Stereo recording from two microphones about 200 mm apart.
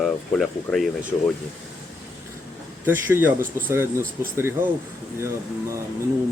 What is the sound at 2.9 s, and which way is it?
A man's voice, 10° right (ahead or behind).